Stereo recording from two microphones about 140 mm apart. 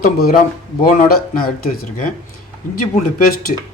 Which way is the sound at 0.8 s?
80° left.